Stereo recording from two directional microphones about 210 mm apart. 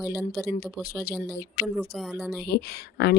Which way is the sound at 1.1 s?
5° left (ahead or behind).